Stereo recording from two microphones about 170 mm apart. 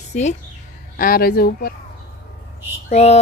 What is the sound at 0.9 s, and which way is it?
Speech, 60° left (ahead or behind).